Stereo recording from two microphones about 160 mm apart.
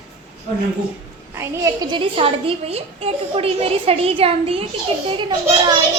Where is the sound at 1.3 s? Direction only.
20° right (ahead or behind).